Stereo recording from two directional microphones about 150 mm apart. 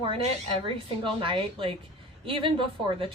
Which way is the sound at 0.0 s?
35° right (ahead or behind).